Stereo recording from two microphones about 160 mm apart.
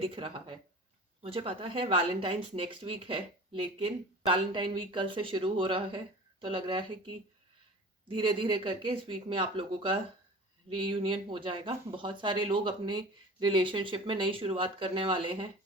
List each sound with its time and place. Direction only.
0.0 s speech: 35° right (ahead or behind)
8.0 s speech: 30° right (ahead or behind)